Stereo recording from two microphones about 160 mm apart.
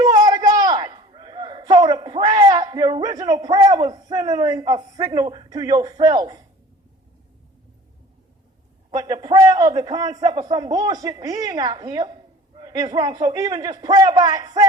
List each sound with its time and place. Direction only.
0.0 s a sound: 25° right (ahead or behind)
4.4 s a woman's voice: 25° right (ahead or behind)
9.0 s a woman's voice: 25° right (ahead or behind)